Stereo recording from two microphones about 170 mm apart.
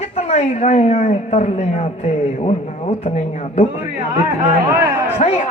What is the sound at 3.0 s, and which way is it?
Speech, 40° left (ahead or behind).